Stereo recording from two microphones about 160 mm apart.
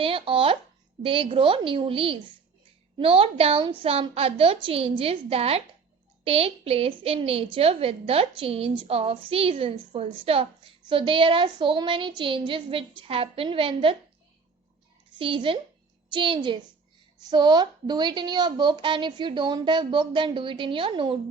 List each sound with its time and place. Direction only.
0.0 s a woman's voice: 35° right (ahead or behind)
15.2 s a woman's voice: 35° right (ahead or behind)